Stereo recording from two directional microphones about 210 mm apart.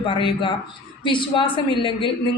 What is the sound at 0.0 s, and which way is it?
A woman's voice, 25° left (ahead or behind).